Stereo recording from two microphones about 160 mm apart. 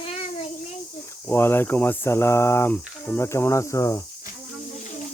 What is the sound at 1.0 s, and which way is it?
Speech, 15° left (ahead or behind).